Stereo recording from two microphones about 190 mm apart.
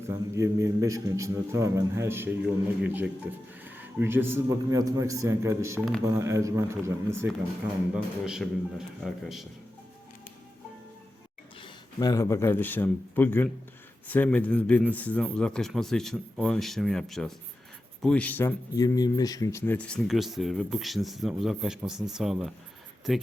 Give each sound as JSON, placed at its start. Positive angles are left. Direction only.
{"t": 0.1, "sound": "a man's voice", "side_deg": -15}
{"t": 11.6, "sound": "speech", "side_deg": 20}